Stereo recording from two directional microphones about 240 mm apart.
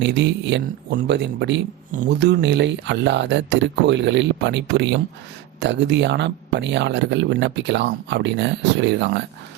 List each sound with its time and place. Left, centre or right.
0.0 s speech: right